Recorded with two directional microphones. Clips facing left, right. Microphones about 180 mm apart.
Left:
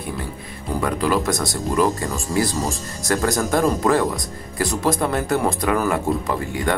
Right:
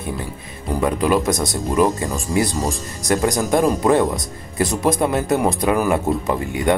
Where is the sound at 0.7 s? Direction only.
20° right (ahead or behind).